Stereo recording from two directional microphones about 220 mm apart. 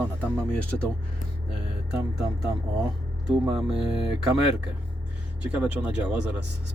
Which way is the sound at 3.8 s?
25° left (ahead or behind).